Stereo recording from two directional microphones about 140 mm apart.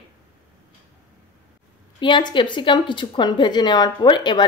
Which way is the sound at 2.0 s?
35° left (ahead or behind).